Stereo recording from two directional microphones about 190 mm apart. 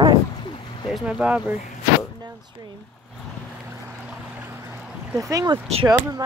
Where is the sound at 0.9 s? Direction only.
5° right (ahead or behind).